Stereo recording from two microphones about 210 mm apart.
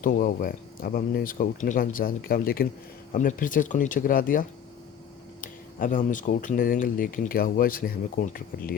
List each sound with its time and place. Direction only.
0.0 s speech: 40° left (ahead or behind)